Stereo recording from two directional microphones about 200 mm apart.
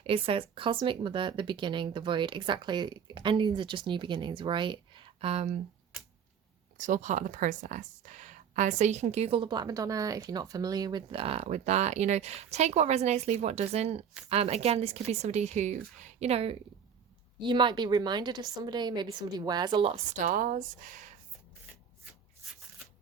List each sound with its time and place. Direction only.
0.0 s speech: 25° right (ahead or behind)
6.7 s speech: 40° right (ahead or behind)